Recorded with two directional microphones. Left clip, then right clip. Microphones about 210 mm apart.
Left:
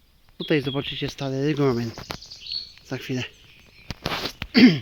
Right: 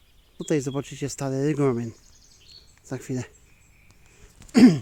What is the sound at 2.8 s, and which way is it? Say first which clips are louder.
Speech: left 3 dB; 10° right (ahead or behind).